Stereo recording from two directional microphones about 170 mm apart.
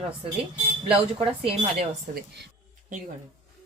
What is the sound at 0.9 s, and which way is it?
Speech, 35° right (ahead or behind).